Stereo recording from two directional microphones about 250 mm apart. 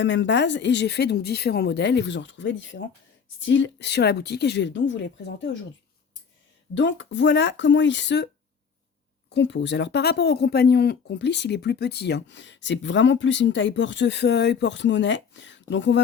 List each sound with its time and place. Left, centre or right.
0.0 s speech: left
6.7 s speech: left
9.3 s speech: left